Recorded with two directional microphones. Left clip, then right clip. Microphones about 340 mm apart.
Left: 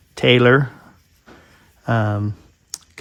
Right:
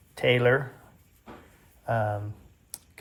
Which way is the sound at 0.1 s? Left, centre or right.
Centre.